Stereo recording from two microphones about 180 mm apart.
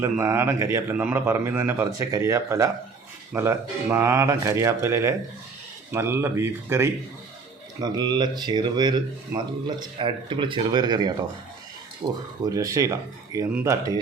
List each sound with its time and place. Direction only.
0.0 s a man's voice: 15° right (ahead or behind)